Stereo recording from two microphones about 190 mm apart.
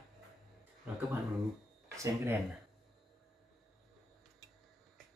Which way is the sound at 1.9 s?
15° right (ahead or behind).